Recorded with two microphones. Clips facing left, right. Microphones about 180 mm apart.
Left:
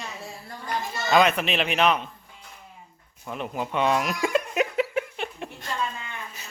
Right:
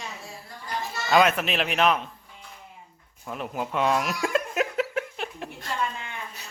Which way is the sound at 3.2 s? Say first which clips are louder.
Left 1 dB; centre (ahead or behind).